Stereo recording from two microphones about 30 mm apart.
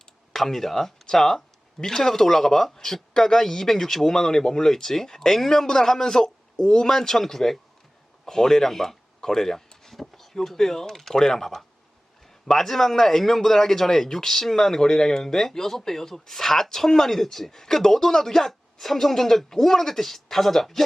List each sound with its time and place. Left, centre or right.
0.3 s a man's voice: centre
8.2 s a sound: centre
10.3 s a man's voice: centre